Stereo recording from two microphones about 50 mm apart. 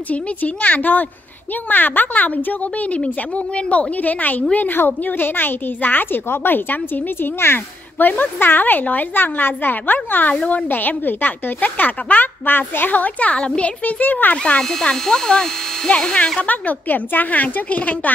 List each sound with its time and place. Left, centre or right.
0.1 s a woman's voice: left
8.0 s a woman's voice: left
14.3 s speech: left
14.6 s speech: centre
16.3 s a woman's voice: left